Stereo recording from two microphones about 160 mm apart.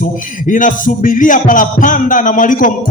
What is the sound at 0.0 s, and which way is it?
Music, 55° left (ahead or behind).